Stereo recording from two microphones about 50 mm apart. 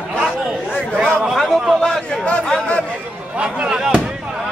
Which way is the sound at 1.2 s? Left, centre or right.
Centre.